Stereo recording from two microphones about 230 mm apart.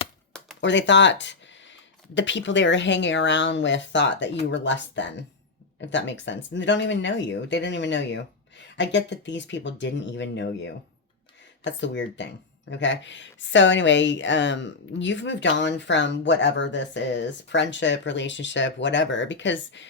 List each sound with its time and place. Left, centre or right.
0.6 s speech: left